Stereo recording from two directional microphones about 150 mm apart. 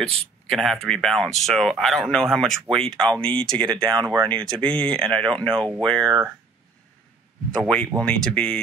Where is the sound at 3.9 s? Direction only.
30° right (ahead or behind).